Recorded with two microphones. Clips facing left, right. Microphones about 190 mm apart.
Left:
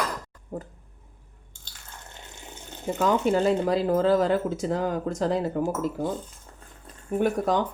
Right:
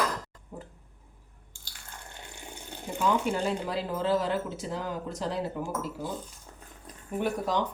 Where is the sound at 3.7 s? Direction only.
45° left (ahead or behind).